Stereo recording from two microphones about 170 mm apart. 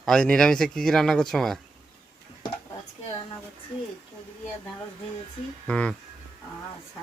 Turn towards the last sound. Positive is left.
turn(degrees=5)  # may be behind; listen again after turning